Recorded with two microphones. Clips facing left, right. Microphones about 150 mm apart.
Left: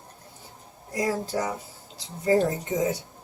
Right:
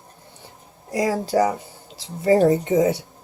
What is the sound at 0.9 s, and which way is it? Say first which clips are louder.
Speech: right 5 dB; 90° right.